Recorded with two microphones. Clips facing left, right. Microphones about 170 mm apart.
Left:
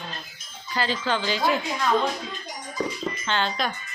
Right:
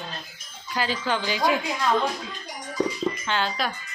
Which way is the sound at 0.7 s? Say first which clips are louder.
Even; 10° right (ahead or behind).